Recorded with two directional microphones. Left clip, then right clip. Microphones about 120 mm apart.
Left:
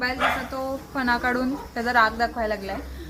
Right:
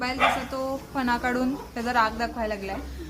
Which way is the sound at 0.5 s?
20° left (ahead or behind).